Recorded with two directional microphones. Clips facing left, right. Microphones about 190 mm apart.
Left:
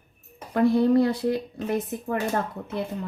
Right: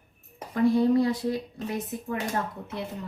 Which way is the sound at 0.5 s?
65° left (ahead or behind).